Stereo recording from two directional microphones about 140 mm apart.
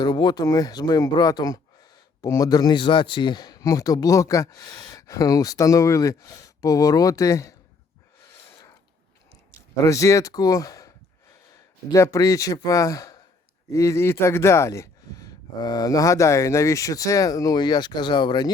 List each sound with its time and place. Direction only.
0.0 s speech: 30° left (ahead or behind)
9.8 s speech: 20° left (ahead or behind)